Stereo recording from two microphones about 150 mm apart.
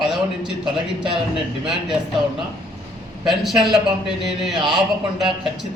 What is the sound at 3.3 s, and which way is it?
A man's voice, centre (ahead or behind).